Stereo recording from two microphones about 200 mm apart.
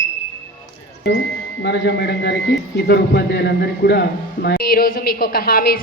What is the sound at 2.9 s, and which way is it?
A man's voice, 55° left (ahead or behind).